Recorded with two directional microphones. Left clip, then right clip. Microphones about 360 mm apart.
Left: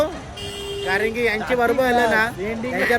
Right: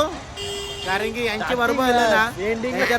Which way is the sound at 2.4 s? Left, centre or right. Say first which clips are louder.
Even; centre.